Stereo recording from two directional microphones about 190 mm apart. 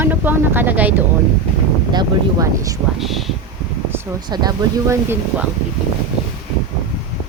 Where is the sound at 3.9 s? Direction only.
20° right (ahead or behind).